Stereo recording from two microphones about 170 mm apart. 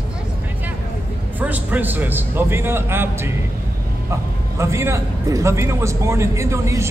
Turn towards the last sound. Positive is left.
turn(degrees=-15)  # may be behind; listen again after turning